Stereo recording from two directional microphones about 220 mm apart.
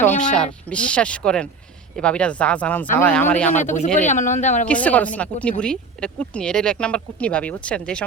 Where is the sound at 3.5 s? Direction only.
35° left (ahead or behind).